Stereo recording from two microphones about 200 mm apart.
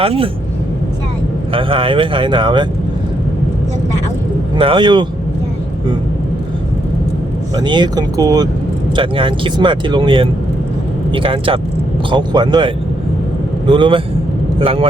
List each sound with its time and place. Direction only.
0.0 s speech: 30° right (ahead or behind)
1.5 s speech: 25° right (ahead or behind)
4.5 s speech: 25° right (ahead or behind)
7.5 s speech: 20° right (ahead or behind)